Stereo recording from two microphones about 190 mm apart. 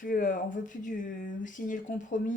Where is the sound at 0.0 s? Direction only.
45° left (ahead or behind).